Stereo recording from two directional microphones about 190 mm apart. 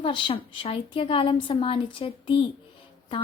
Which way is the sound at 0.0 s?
25° left (ahead or behind).